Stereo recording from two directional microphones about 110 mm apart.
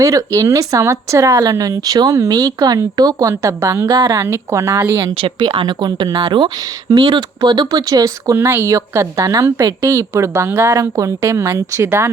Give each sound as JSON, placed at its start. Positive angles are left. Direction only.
{"t": 0.0, "sound": "speech", "side_deg": -30}
{"t": 3.8, "sound": "speech", "side_deg": -45}
{"t": 4.1, "sound": "a woman's voice", "side_deg": -25}
{"t": 5.0, "sound": "speech", "side_deg": -45}
{"t": 8.4, "sound": "a woman's voice", "side_deg": -20}